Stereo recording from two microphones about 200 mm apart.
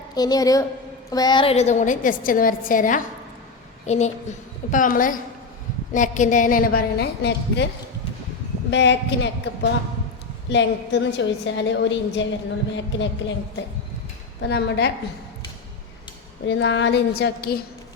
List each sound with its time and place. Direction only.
0.1 s a woman's voice: 20° left (ahead or behind); by 7.7 s 60° left (ahead or behind)
8.7 s a woman's voice: 60° left (ahead or behind)
14.4 s a woman's voice: 55° left (ahead or behind)
16.5 s a woman's voice: 65° left (ahead or behind)